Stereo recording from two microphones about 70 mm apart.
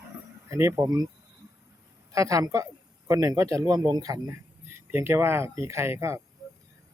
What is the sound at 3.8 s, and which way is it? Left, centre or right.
Speech, right.